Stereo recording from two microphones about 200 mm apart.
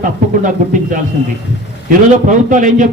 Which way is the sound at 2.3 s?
40° right (ahead or behind).